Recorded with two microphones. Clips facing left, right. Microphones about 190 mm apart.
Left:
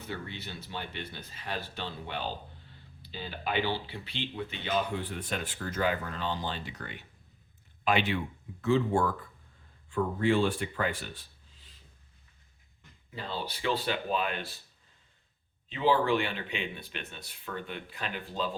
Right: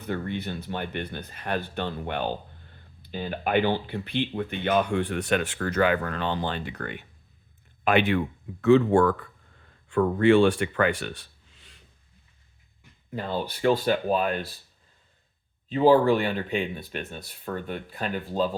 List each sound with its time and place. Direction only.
0.1 s speech: 55° right (ahead or behind)
8.6 s speech: 70° right (ahead or behind)
13.1 s speech: 50° right (ahead or behind)
15.7 s speech: 40° right (ahead or behind)